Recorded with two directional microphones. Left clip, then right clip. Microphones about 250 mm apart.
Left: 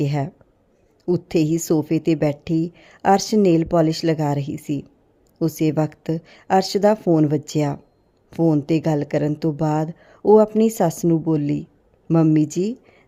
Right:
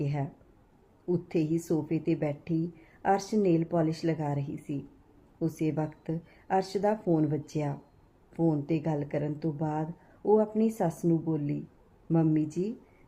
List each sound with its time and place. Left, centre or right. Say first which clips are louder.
0.0 s a woman's voice: left 11 dB; left